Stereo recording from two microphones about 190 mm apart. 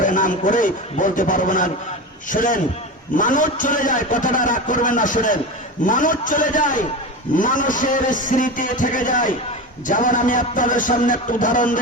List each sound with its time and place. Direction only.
0.0 s a man's voice: 45° left (ahead or behind)